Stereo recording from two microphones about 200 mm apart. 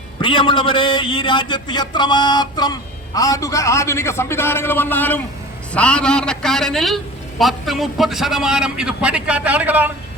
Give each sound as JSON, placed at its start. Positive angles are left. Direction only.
{"t": 0.2, "sound": "a man's voice", "side_deg": 25}